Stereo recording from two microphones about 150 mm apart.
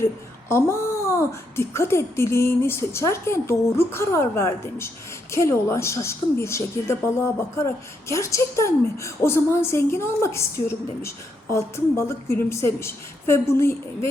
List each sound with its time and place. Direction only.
0.0 s a woman's voice: 15° left (ahead or behind)